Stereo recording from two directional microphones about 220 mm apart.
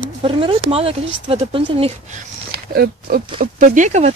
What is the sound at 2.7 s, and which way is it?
Speech, 45° right (ahead or behind).